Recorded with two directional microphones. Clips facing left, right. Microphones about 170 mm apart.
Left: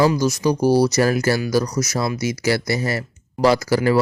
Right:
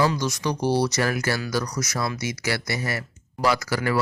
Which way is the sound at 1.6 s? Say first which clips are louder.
Left 5 dB; 25° left (ahead or behind).